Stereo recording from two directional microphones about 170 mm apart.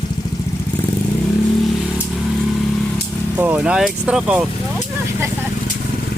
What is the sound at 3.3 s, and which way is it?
Speech, 10° right (ahead or behind).